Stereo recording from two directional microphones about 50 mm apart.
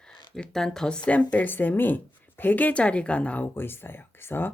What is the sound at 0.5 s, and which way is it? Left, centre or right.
Speech, centre.